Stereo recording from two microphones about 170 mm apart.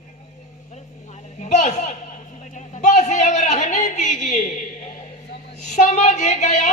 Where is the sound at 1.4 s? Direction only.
45° left (ahead or behind).